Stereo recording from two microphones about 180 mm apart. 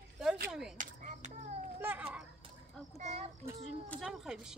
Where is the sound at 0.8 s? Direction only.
45° right (ahead or behind).